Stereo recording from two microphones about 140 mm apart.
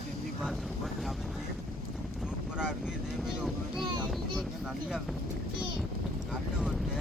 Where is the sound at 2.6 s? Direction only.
5° right (ahead or behind).